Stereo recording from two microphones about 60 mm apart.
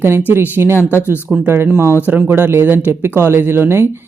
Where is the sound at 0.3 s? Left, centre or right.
Right.